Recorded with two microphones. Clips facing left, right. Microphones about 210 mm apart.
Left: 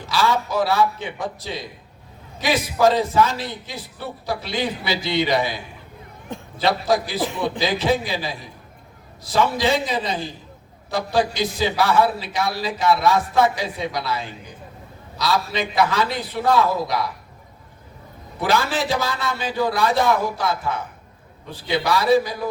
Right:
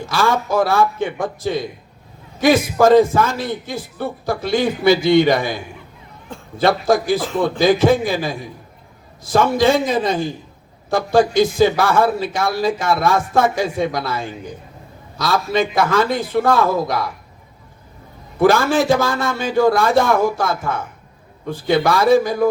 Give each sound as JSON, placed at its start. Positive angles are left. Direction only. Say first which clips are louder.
{"t": 0.0, "sound": "a man's voice", "louder": "right 3 dB", "side_deg": -50}
{"t": 6.6, "sound": "a man's voice", "louder": "right 5 dB", "side_deg": -50}
{"t": 18.3, "sound": "a man's voice", "louder": "right 7 dB", "side_deg": -50}